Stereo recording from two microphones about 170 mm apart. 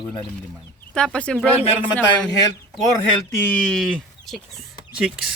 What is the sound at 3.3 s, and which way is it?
Speech, 10° left (ahead or behind).